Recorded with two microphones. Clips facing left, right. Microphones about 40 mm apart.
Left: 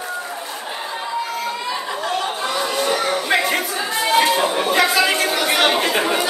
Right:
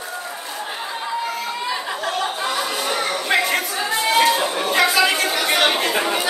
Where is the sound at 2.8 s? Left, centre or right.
Centre.